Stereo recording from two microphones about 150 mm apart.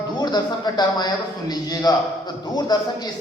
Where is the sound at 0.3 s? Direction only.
30° left (ahead or behind).